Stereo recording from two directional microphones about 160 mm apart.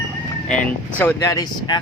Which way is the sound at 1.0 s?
15° left (ahead or behind).